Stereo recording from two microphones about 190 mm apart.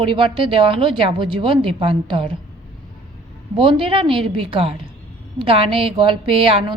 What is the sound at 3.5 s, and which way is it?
A woman's voice, 25° right (ahead or behind).